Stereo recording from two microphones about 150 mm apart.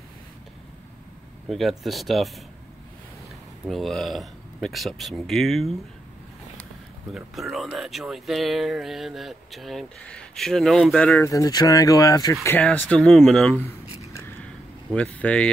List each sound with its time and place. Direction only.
1.5 s speech: centre (ahead or behind)
3.6 s speech: centre (ahead or behind)
7.2 s speech: centre (ahead or behind)
11.2 s speech: 20° left (ahead or behind)
12.5 s speech: 10° left (ahead or behind)
13.7 s a sound: 15° left (ahead or behind)